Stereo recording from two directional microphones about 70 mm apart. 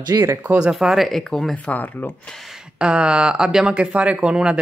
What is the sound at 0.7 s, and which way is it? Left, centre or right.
Speech, centre.